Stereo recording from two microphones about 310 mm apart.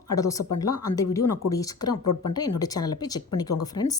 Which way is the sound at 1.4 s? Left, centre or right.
Centre.